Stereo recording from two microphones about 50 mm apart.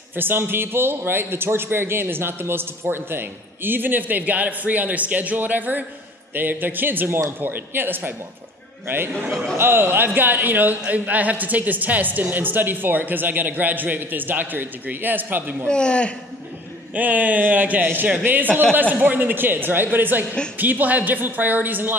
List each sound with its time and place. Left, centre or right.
0.1 s a man's voice: right
15.6 s a man's voice: centre
16.9 s a woman's voice: right